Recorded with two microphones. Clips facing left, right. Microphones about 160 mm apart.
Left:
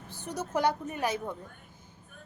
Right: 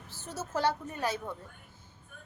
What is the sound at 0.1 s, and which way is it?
Speech, 15° left (ahead or behind).